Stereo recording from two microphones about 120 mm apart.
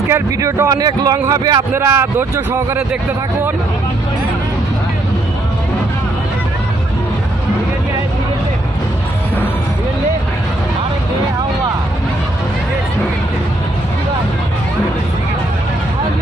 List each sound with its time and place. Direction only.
0.1 s speech: 25° right (ahead or behind)
1.7 s speech: 15° right (ahead or behind)